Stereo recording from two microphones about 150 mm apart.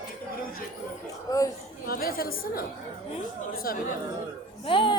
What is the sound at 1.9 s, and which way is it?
Speech, 80° left.